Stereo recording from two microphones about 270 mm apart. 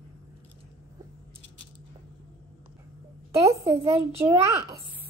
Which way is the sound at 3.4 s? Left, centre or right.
Right.